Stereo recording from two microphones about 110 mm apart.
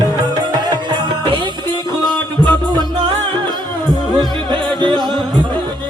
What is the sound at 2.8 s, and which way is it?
Music, 45° right (ahead or behind).